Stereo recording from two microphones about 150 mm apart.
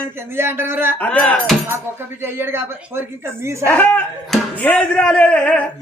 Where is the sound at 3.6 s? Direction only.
10° left (ahead or behind).